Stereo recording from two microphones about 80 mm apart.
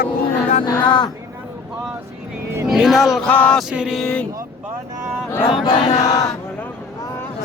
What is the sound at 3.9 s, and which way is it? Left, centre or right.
Speech, centre.